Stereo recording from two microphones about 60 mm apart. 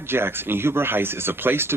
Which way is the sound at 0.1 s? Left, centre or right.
Right.